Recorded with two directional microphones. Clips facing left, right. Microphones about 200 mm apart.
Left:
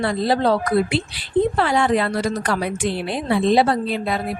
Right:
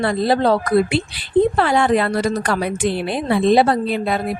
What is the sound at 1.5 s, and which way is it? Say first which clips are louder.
A woman's voice: right 2 dB; 55° right (ahead or behind).